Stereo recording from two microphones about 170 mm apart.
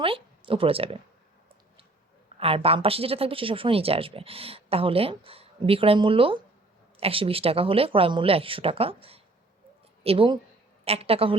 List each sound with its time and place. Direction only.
0.0 s speech: 30° right (ahead or behind)
2.4 s speech: 35° right (ahead or behind)